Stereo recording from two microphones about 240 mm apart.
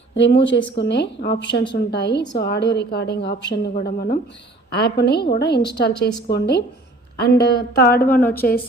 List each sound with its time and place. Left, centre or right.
0.1 s a woman's voice: left
8.0 s a woman's voice: centre